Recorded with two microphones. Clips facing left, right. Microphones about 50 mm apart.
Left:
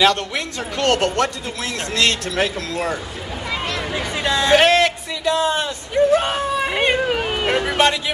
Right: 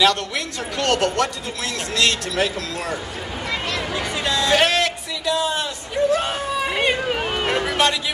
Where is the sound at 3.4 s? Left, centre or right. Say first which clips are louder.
Left 1 dB; centre.